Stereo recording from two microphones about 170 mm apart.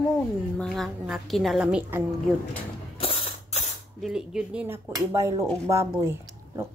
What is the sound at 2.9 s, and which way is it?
Mechanisms, 35° left (ahead or behind).